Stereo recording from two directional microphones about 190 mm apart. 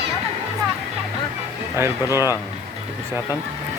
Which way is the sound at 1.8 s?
15° right (ahead or behind).